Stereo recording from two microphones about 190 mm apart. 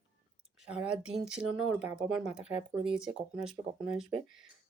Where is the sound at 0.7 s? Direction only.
5° right (ahead or behind).